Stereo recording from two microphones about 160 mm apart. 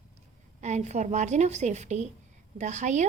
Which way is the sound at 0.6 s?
45° right (ahead or behind).